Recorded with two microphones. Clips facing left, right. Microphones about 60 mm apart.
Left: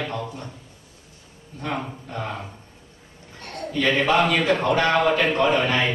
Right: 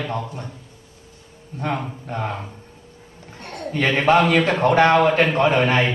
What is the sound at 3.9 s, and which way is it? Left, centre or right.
Speech, right.